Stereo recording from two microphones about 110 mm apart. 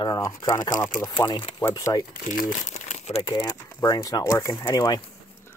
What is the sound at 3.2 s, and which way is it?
Speech, 35° left (ahead or behind).